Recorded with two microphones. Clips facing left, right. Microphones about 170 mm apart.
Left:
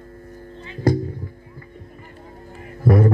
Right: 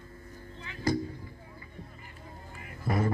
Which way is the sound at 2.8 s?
65° left (ahead or behind).